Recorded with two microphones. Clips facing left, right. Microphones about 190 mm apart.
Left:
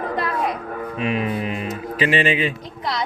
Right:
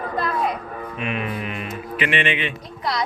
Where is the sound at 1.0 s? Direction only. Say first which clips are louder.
Left 4 dB; 30° left (ahead or behind).